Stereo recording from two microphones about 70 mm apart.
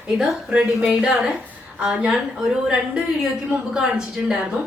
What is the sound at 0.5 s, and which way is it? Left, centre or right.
A woman's voice, centre.